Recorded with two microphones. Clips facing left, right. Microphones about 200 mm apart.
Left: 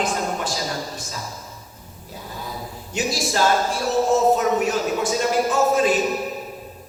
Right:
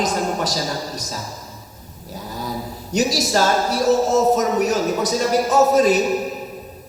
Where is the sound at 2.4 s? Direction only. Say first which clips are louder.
Right 6 dB; 40° right (ahead or behind).